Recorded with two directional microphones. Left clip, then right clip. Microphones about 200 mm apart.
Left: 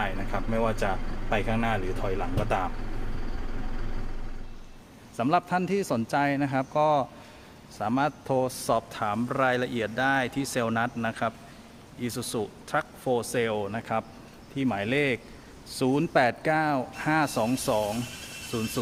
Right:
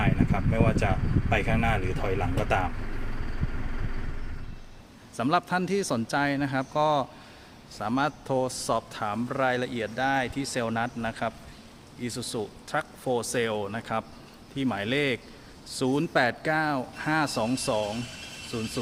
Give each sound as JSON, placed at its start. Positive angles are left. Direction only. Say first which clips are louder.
{"t": 0.3, "sound": "a sound", "louder": "even", "side_deg": -5}
{"t": 1.3, "sound": "speech", "louder": "right 1 dB", "side_deg": -10}
{"t": 5.1, "sound": "speech", "louder": "left 1 dB", "side_deg": 0}